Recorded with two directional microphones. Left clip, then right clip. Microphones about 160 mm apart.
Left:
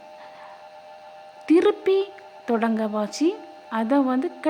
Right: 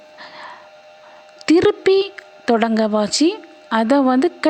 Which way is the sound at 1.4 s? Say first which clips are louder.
Right 5 dB; 35° right (ahead or behind).